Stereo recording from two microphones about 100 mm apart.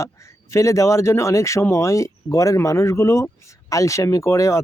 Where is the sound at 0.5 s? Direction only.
30° left (ahead or behind).